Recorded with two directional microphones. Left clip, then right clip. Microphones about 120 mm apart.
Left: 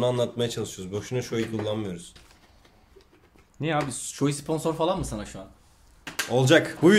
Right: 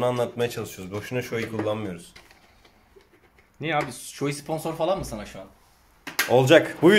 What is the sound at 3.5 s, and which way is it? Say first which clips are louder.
Speech: right 1 dB; 75° left (ahead or behind).